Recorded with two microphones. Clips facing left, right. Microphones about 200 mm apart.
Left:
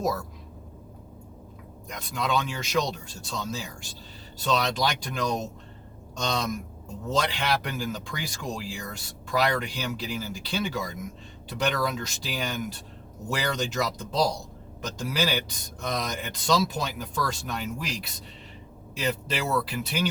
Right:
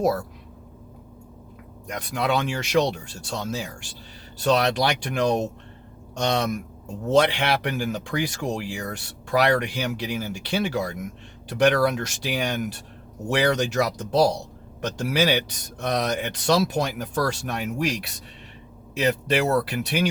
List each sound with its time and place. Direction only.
0.0 s speech: 70° right (ahead or behind)
1.9 s speech: 70° right (ahead or behind)